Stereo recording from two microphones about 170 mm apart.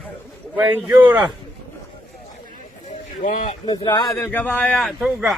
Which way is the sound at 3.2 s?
50° left (ahead or behind).